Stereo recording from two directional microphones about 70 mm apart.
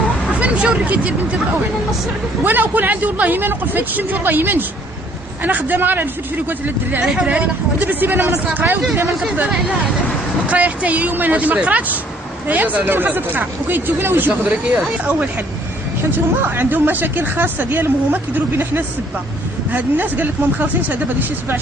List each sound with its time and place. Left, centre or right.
0.3 s speech: centre
2.4 s speech: right
7.0 s speech: centre